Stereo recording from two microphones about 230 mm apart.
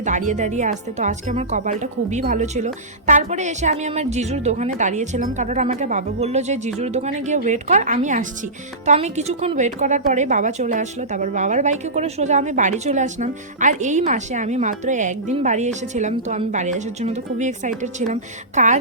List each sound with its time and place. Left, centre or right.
0.0 s a woman's voice: right